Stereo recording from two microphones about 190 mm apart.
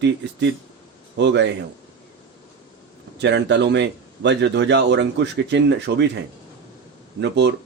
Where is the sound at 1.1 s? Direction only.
70° right (ahead or behind).